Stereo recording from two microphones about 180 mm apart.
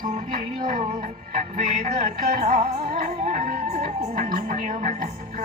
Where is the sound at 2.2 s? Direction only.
50° right (ahead or behind).